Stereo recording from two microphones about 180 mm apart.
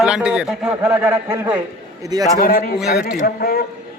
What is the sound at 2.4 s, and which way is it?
A man's voice, 55° left (ahead or behind).